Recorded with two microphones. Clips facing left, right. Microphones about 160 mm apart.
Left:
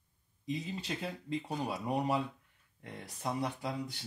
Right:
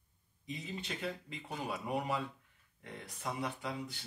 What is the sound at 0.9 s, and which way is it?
Speech, 35° left (ahead or behind).